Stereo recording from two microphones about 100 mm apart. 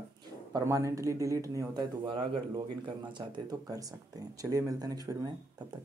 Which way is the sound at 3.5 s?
40° right (ahead or behind).